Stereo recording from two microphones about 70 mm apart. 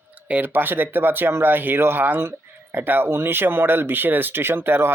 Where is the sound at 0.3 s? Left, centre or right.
Right.